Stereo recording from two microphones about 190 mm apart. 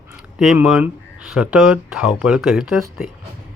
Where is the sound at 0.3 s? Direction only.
Centre (ahead or behind).